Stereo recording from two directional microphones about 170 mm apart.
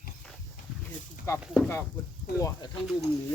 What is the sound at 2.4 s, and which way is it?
Speech, 20° left (ahead or behind).